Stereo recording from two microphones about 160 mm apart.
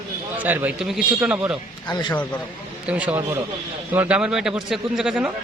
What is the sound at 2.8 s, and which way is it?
A man's voice, 10° right (ahead or behind).